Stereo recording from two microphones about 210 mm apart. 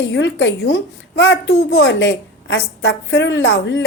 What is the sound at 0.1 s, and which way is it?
A woman's voice, 60° left (ahead or behind).